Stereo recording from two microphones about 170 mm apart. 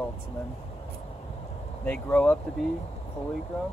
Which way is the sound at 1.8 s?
10° left (ahead or behind).